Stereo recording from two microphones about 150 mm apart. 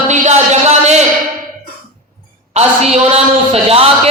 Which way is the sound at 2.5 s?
45° right (ahead or behind).